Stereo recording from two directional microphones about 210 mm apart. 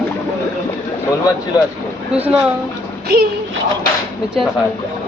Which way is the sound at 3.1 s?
50° right (ahead or behind).